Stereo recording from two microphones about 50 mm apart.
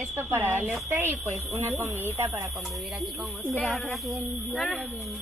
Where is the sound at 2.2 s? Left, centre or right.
Right.